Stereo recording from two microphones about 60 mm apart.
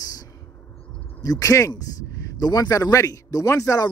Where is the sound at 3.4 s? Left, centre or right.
Left.